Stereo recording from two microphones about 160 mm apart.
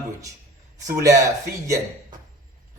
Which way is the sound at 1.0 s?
20° right (ahead or behind).